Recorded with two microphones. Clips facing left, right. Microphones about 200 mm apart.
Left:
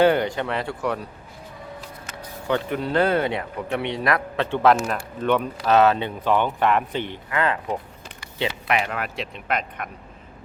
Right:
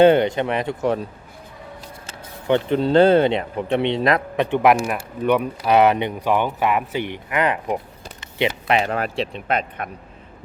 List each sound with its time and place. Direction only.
0.0 s speech: 20° right (ahead or behind)
2.0 s speech: 25° right (ahead or behind)
8.2 s a sound: 20° right (ahead or behind)
8.6 s speech: 30° right (ahead or behind)